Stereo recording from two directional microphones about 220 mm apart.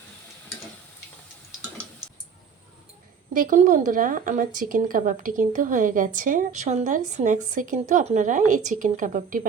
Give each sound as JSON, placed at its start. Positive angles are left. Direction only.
{"t": 3.3, "sound": "a woman's voice", "side_deg": -35}